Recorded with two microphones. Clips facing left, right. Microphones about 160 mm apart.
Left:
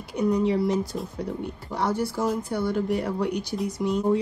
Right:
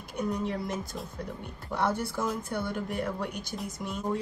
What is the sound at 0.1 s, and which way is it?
Speech, 55° right (ahead or behind).